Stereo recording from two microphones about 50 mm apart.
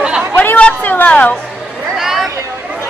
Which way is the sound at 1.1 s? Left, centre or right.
Left.